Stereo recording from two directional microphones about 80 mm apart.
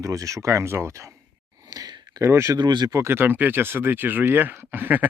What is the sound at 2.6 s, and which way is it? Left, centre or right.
Speech, right.